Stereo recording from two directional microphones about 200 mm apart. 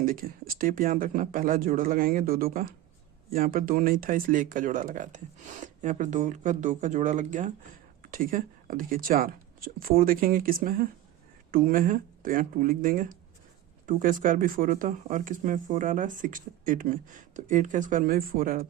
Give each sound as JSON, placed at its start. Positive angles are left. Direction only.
{"t": 0.0, "sound": "speech", "side_deg": -45}